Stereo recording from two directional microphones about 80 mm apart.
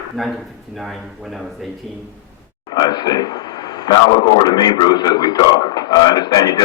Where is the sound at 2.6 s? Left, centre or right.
Left.